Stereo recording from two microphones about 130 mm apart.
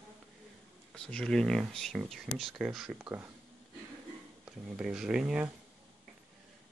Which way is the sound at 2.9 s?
15° right (ahead or behind).